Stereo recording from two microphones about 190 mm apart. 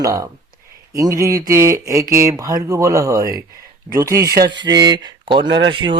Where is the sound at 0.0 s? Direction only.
20° right (ahead or behind).